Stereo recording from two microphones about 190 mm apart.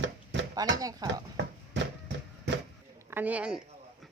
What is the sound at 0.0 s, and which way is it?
Chopping, 65° right (ahead or behind).